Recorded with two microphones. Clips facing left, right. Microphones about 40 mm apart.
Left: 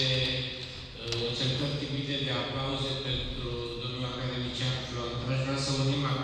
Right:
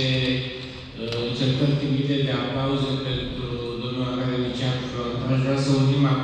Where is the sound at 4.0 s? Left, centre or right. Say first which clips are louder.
Right 12 dB; right.